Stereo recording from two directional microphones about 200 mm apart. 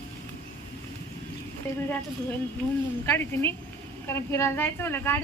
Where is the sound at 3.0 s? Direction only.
10° left (ahead or behind).